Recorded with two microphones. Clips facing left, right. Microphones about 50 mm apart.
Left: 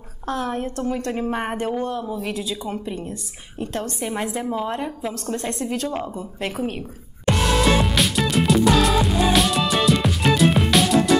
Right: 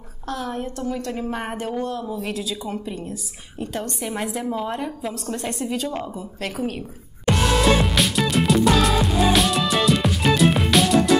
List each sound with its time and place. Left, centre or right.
0.3 s a woman's voice: left; by 5.1 s centre
5.1 s a woman's voice: centre
6.4 s a woman's voice: centre
7.2 s music: centre